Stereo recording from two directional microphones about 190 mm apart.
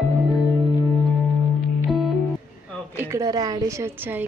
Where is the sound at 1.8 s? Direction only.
Centre (ahead or behind).